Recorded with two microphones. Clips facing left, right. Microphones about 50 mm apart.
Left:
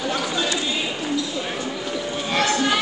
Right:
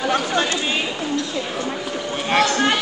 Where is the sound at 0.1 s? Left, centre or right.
Right.